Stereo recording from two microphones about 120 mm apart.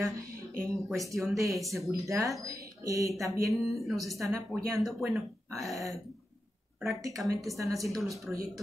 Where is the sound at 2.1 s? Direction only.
25° right (ahead or behind).